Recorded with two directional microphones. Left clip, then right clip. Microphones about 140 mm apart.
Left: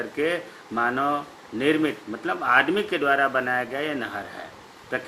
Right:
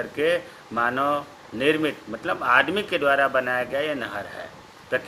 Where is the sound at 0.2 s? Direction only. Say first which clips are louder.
Right 3 dB; 45° right (ahead or behind).